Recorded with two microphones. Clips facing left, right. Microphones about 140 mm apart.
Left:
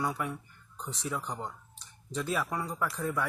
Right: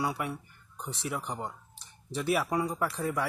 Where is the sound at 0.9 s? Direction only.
70° right (ahead or behind).